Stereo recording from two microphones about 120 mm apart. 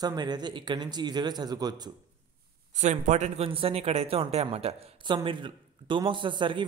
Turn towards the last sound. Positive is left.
turn(degrees=-40)  # may be behind; listen again after turning